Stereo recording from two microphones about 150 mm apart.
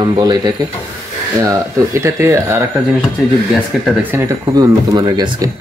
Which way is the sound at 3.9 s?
15° right (ahead or behind).